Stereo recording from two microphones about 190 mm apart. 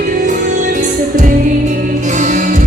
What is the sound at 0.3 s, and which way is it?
Music, 45° right (ahead or behind).